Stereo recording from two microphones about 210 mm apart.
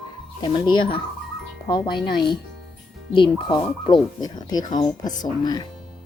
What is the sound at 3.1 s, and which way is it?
Speech, 25° left (ahead or behind).